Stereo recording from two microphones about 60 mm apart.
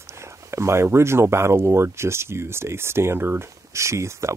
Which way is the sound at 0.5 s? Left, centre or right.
Right.